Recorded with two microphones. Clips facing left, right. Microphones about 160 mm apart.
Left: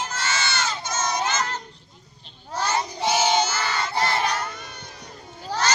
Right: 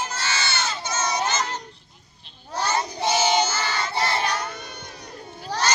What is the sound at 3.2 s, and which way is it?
Child singing, 10° right (ahead or behind).